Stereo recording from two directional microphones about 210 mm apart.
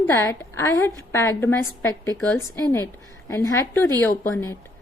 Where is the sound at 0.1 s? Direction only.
15° left (ahead or behind).